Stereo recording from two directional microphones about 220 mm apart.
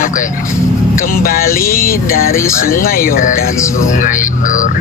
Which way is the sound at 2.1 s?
40° left (ahead or behind).